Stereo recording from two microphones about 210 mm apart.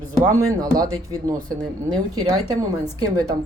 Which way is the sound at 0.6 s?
15° right (ahead or behind).